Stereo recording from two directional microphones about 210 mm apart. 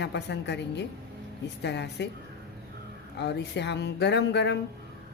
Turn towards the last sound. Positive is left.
turn(degrees=55)  # may be behind; listen again after turning